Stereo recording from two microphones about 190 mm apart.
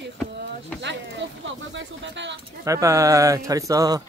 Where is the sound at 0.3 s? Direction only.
65° right (ahead or behind).